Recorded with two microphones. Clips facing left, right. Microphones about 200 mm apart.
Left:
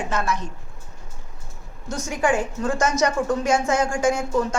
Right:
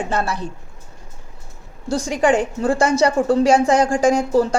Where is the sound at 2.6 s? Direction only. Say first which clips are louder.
Right 5 dB; 30° right (ahead or behind).